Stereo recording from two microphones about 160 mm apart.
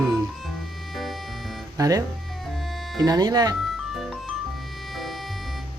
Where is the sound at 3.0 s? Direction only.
25° right (ahead or behind).